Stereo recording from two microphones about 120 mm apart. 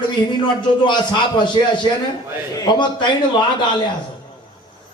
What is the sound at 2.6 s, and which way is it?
A man's voice, 40° left (ahead or behind).